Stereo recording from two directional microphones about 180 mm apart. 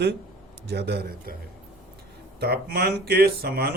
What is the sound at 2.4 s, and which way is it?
Speech, 60° right (ahead or behind).